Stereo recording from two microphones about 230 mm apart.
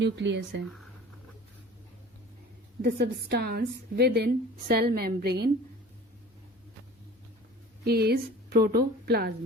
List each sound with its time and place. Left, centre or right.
0.0 s a woman's voice: right
2.8 s a woman's voice: right
7.9 s a woman's voice: right